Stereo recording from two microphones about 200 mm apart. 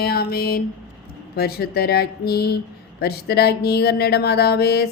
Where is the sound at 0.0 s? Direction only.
50° left (ahead or behind).